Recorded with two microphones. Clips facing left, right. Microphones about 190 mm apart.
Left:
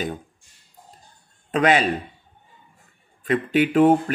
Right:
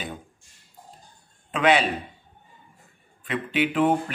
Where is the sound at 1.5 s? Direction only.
40° left (ahead or behind).